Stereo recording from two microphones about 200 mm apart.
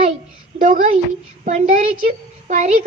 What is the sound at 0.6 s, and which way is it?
A child's voice, 40° right (ahead or behind).